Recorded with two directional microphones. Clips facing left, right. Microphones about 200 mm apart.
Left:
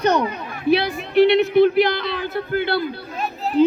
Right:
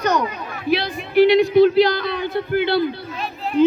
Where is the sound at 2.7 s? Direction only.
40° left (ahead or behind).